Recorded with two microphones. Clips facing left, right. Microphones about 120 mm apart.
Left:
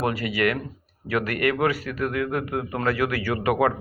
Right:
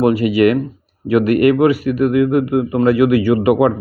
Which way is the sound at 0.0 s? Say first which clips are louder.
Right 11 dB; 25° right (ahead or behind).